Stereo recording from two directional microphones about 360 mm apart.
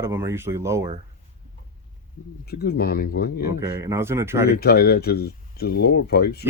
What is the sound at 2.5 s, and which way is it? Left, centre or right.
Speech, left.